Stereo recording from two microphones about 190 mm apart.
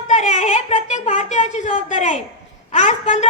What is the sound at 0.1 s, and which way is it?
A woman's voice, 40° left (ahead or behind).